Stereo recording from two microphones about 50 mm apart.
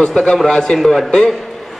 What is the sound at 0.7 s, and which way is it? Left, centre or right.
Speech, centre.